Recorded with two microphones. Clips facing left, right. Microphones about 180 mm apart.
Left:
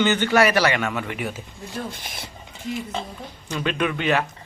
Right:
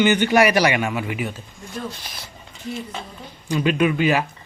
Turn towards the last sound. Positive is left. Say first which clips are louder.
# right 4 dB
turn(degrees=-5)  # may be behind; listen again after turning